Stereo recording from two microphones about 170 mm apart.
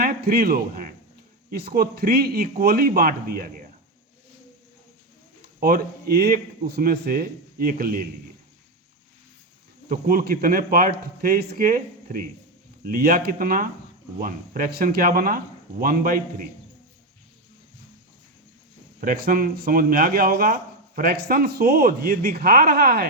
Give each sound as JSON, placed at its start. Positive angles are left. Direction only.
{"t": 0.0, "sound": "a sound", "side_deg": -65}
{"t": 1.5, "sound": "speech", "side_deg": -65}
{"t": 5.5, "sound": "speech", "side_deg": -65}
{"t": 9.9, "sound": "speech", "side_deg": -55}
{"t": 18.9, "sound": "speech", "side_deg": -60}